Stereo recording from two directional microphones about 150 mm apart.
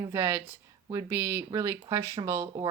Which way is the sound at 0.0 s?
20° right (ahead or behind).